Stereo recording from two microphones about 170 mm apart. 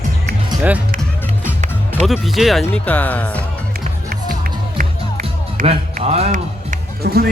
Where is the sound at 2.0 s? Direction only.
Centre (ahead or behind).